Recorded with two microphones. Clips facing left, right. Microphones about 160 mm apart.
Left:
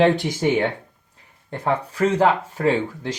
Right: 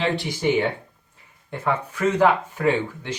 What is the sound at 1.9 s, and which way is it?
Speech, 35° left (ahead or behind).